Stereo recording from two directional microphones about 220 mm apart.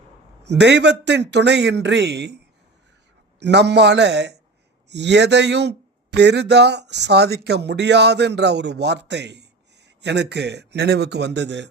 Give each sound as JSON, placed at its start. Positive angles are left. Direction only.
{"t": 0.4, "sound": "speech", "side_deg": -50}
{"t": 3.4, "sound": "speech", "side_deg": -50}